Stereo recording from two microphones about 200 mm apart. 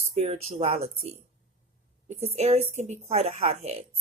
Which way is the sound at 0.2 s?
35° right (ahead or behind).